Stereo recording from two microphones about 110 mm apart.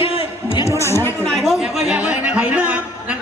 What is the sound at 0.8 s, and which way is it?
Speech, 25° left (ahead or behind).